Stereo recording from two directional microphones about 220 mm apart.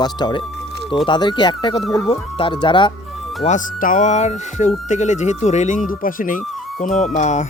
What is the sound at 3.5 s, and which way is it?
Speech, 35° left (ahead or behind).